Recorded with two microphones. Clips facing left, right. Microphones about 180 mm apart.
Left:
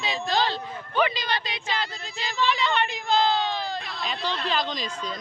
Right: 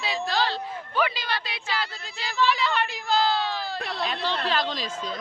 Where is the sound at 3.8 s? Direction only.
65° right (ahead or behind).